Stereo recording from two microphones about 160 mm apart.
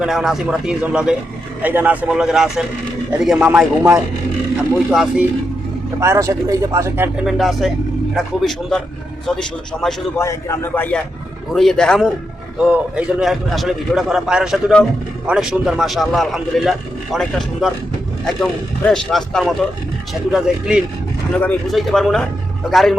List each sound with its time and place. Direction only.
0.0 s a man's voice: 5° right (ahead or behind)
6.0 s speech: 20° right (ahead or behind)
7.3 s a man's voice: centre (ahead or behind)
10.2 s a man's voice: 20° left (ahead or behind)
11.5 s a man's voice: 5° left (ahead or behind)